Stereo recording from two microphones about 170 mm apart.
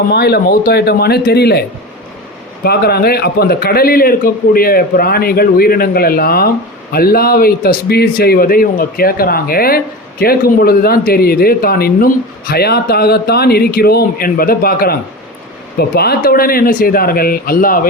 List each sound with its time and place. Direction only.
0.1 s speech: 70° left (ahead or behind)
2.6 s a man's voice: 65° left (ahead or behind)